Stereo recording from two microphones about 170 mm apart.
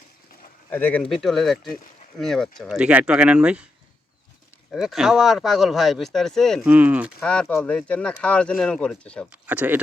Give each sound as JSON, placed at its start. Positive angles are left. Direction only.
{"t": 0.7, "sound": "speech", "side_deg": 10}
{"t": 4.7, "sound": "speech", "side_deg": 0}
{"t": 6.7, "sound": "speech", "side_deg": -10}
{"t": 7.2, "sound": "speech", "side_deg": 5}
{"t": 9.3, "sound": "speech", "side_deg": -10}